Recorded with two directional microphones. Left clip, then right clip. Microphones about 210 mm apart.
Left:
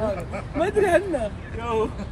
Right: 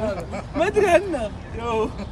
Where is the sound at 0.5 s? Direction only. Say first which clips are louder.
Right 2 dB; 30° right (ahead or behind).